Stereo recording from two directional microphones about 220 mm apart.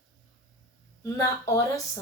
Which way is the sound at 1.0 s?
15° left (ahead or behind).